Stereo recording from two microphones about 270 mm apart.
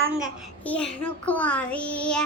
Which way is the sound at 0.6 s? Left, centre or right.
Centre.